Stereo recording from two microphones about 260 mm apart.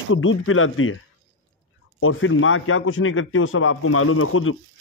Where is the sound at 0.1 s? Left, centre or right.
Left.